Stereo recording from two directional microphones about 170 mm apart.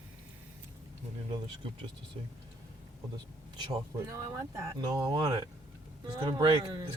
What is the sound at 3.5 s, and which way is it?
Speech, 20° right (ahead or behind).